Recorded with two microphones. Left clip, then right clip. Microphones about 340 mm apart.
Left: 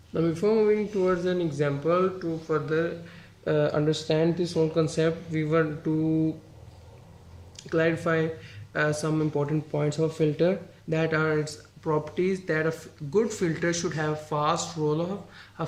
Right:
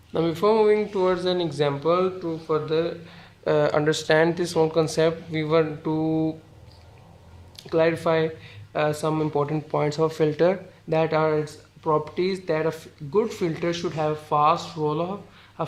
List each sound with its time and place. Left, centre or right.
0.1 s speech: centre
7.5 s speech: centre